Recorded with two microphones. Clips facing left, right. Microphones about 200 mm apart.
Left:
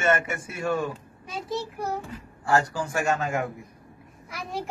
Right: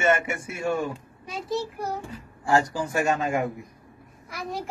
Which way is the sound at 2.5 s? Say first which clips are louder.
Right 1 dB; 20° right (ahead or behind).